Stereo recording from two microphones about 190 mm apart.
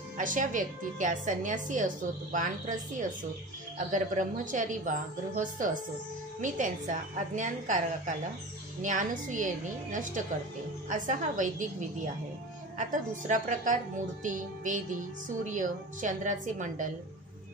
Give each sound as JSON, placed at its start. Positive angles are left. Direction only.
{"t": 0.2, "sound": "a woman's voice", "side_deg": -45}
{"t": 13.3, "sound": "a woman's voice", "side_deg": -40}